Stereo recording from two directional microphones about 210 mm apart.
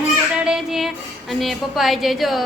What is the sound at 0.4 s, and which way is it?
Music, centre (ahead or behind).